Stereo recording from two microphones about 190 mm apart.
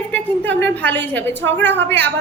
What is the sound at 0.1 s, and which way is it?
A woman's voice, 10° left (ahead or behind).